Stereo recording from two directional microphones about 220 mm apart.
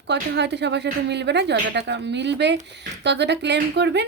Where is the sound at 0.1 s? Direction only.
50° right (ahead or behind).